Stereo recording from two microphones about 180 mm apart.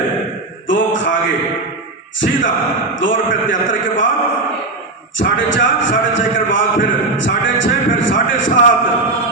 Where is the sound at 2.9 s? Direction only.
90° left.